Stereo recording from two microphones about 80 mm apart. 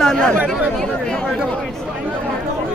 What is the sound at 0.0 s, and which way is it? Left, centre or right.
Speech, centre.